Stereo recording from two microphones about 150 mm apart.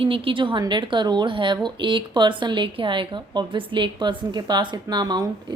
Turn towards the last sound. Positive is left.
turn(degrees=-25)  # may be behind; listen again after turning